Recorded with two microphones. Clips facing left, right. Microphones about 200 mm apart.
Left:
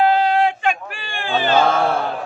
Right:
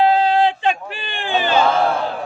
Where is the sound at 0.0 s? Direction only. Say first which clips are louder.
Right 1 dB; 30° right (ahead or behind).